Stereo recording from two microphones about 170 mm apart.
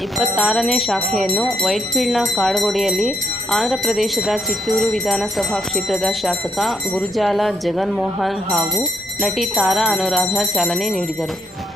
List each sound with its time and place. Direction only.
0.2 s jingle bell: centre (ahead or behind)